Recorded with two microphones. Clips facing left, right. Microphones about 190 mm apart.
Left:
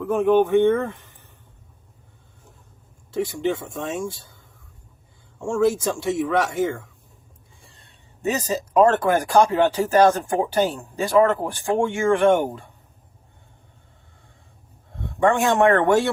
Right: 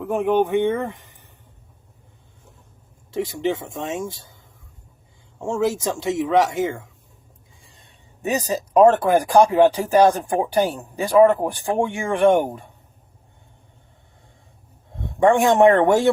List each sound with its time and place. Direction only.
0.1 s speech: 15° right (ahead or behind)
3.1 s speech: 20° right (ahead or behind)
5.8 s speech: 20° right (ahead or behind)
14.9 s speech: 20° right (ahead or behind)